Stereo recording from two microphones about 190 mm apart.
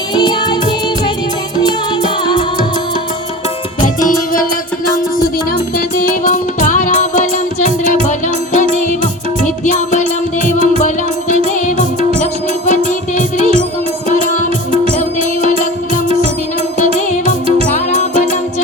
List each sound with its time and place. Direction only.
3.8 s music: 45° left (ahead or behind)
6.2 s music: 40° left (ahead or behind)
16.7 s music: 40° left (ahead or behind)